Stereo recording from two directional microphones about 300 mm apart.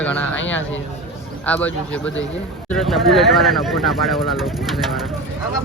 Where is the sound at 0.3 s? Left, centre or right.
Left.